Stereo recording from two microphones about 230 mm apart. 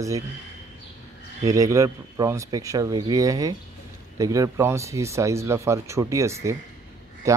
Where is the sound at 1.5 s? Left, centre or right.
Centre.